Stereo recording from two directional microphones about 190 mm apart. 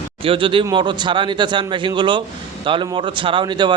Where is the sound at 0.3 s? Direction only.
25° right (ahead or behind).